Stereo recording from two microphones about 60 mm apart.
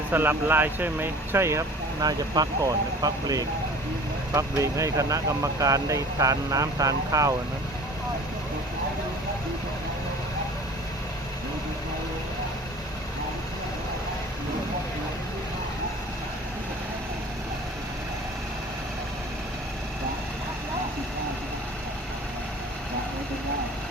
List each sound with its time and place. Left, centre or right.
0.1 s speech: right
2.0 s speech: right
4.3 s speech: right